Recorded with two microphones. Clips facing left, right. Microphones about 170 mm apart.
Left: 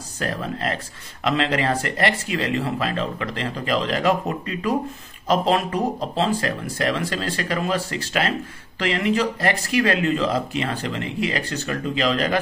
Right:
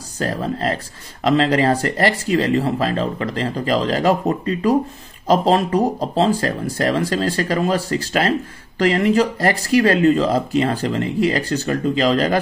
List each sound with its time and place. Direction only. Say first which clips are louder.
0.2 s speech: right 5 dB; 35° right (ahead or behind)